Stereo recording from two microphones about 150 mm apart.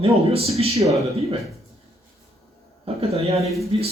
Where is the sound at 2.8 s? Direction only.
45° right (ahead or behind).